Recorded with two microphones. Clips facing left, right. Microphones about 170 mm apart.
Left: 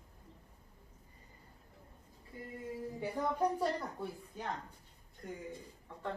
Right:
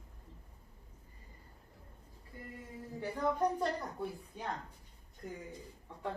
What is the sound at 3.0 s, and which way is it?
Speech, 10° left (ahead or behind).